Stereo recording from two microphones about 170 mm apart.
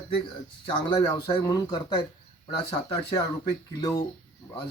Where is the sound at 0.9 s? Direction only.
35° left (ahead or behind).